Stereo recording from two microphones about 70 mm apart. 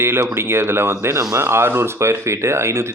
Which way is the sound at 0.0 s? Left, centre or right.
Right.